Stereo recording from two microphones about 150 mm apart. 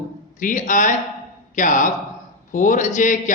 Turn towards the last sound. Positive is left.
turn(degrees=60)  # may be behind; listen again after turning